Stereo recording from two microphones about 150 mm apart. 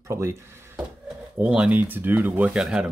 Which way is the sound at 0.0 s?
20° right (ahead or behind).